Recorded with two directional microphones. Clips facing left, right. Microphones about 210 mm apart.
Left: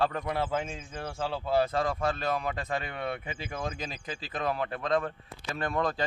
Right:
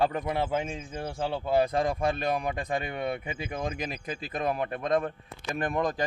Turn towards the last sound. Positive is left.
turn(degrees=-15)  # may be behind; listen again after turning